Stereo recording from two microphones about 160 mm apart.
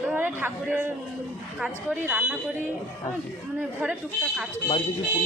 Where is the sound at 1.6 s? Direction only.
5° right (ahead or behind).